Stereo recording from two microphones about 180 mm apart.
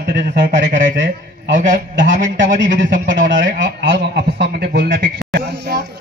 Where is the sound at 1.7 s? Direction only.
45° right (ahead or behind).